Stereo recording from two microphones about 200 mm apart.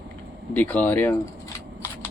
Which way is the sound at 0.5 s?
10° left (ahead or behind).